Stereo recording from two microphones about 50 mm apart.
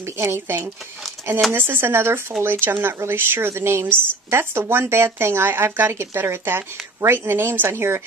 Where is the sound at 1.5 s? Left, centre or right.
Right.